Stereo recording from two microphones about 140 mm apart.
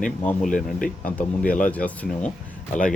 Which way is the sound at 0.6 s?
75° left (ahead or behind).